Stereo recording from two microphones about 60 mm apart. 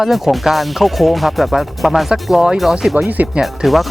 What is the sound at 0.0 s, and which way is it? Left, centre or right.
Speech, centre.